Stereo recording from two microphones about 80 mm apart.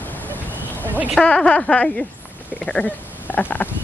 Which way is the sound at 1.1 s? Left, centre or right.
Centre.